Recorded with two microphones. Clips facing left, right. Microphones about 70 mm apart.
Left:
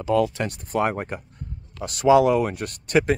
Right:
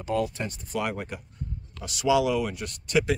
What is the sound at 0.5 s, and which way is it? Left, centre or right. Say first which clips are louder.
Speech: left 7 dB; left.